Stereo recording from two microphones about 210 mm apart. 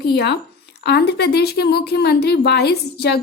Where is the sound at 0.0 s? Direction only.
50° left (ahead or behind).